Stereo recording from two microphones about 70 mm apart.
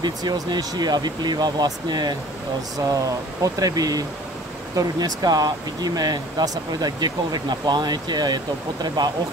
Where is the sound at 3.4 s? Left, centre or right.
Right.